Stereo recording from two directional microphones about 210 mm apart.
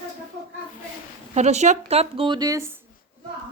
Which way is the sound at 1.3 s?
35° right (ahead or behind).